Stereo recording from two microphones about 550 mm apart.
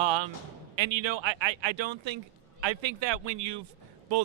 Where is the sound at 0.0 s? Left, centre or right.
Right.